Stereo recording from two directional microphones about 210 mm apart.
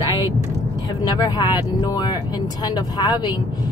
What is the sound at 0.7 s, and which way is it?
Speech, 20° left (ahead or behind).